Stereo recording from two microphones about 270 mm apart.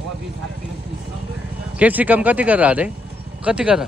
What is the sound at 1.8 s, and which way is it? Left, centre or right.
Speech, centre.